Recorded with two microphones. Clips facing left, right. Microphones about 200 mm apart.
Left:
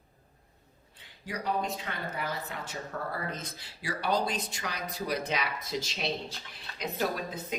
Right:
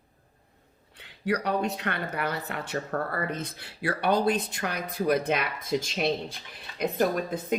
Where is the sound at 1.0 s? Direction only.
70° right (ahead or behind).